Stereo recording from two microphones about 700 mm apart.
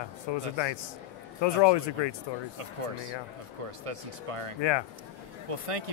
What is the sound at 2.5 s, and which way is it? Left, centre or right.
Speech, right.